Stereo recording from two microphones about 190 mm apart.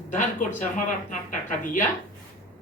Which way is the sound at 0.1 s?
40° left (ahead or behind).